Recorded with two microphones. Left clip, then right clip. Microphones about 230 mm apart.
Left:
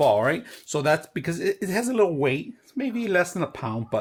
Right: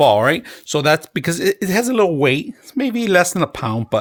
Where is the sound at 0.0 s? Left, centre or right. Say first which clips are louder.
Right 7 dB; right.